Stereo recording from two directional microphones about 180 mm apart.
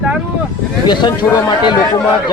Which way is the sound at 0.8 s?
25° left (ahead or behind).